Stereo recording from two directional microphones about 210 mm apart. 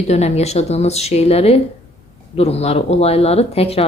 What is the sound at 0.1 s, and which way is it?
A man's voice, 30° left (ahead or behind).